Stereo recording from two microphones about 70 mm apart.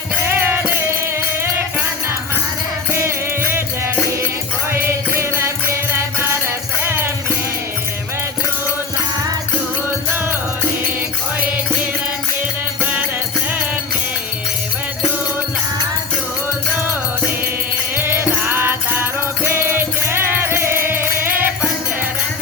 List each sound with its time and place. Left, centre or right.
0.2 s music: right
2.9 s music: right
6.8 s music: right
17.9 s music: right